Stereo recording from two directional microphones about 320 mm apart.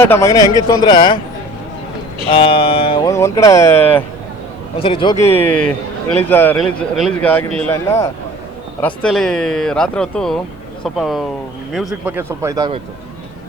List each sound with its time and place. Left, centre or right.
0.0 s speech: centre
2.3 s speech: centre